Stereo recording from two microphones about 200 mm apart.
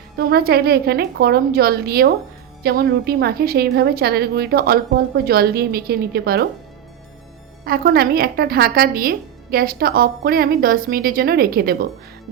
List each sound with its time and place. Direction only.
0.2 s a woman's voice: 50° right (ahead or behind)
7.6 s a woman's voice: 50° right (ahead or behind)